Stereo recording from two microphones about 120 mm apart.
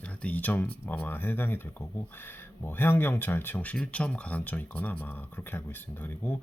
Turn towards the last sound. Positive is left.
turn(degrees=15)  # may be behind; listen again after turning